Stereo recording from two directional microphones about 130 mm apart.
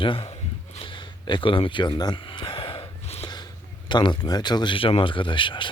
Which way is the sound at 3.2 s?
35° left (ahead or behind).